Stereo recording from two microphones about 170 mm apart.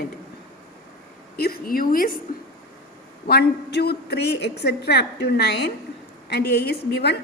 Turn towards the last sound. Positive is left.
turn(degrees=75)  # may be behind; listen again after turning